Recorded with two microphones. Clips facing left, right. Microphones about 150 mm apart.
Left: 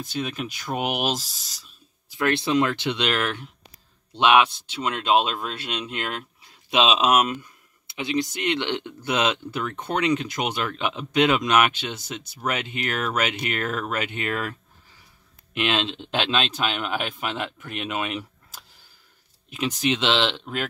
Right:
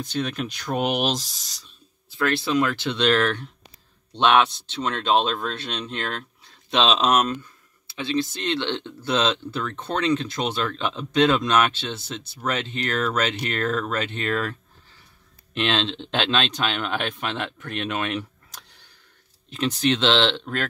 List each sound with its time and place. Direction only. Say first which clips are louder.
0.0 s speech: right 2 dB; 5° left (ahead or behind)
2.1 s speech: left 1 dB; 20° left (ahead or behind)